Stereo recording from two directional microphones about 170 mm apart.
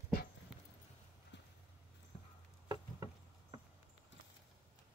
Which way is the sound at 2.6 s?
25° right (ahead or behind).